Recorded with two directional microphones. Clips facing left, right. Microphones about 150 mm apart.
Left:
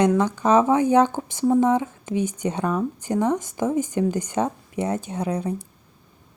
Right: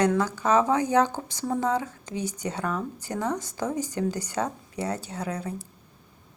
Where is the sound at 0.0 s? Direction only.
20° left (ahead or behind).